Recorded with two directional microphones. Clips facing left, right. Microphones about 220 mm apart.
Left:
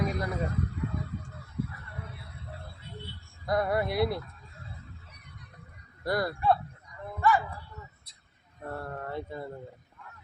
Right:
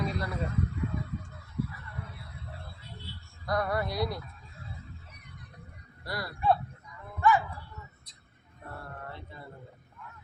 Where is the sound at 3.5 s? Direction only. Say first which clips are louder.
Left 3 dB; 25° left (ahead or behind).